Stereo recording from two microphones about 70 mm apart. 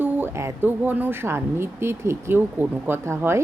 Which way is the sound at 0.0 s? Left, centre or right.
Right.